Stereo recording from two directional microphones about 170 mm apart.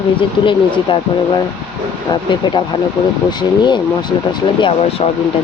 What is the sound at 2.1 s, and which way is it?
Speech, 25° left (ahead or behind).